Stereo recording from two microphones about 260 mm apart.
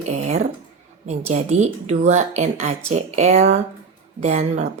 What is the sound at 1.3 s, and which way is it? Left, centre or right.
Speech, right.